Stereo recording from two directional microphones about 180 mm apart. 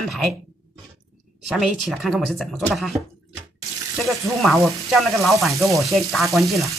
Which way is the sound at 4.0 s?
Centre (ahead or behind).